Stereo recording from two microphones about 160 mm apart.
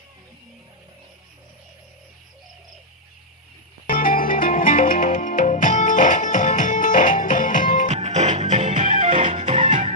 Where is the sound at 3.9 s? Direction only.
60° left (ahead or behind).